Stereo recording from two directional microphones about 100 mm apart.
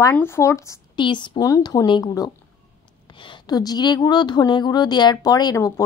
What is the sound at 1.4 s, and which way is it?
Speech, 35° left (ahead or behind).